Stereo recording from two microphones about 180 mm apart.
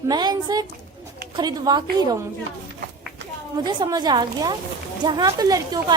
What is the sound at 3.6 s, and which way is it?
A woman's voice, 25° right (ahead or behind).